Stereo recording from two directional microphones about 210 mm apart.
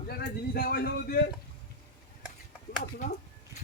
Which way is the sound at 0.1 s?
45° left (ahead or behind).